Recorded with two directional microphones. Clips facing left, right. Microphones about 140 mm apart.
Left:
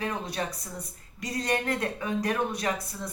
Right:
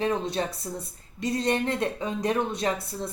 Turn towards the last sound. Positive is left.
turn(degrees=-25)  # may be behind; listen again after turning